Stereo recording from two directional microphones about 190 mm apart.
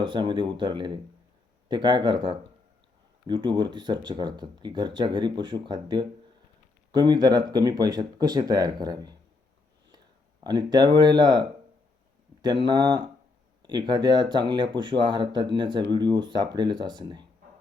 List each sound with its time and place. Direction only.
0.0 s speech: 25° right (ahead or behind)
10.4 s speech: 20° right (ahead or behind)